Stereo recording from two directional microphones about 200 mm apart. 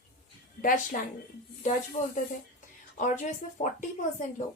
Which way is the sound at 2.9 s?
40° left (ahead or behind).